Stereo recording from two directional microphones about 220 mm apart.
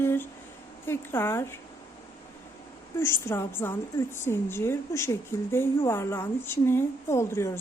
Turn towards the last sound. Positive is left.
turn(degrees=10)  # may be behind; listen again after turning